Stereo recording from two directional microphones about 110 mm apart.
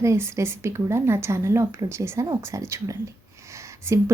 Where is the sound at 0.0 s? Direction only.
25° right (ahead or behind).